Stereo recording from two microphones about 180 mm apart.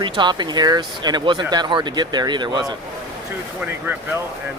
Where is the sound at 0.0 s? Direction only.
25° right (ahead or behind).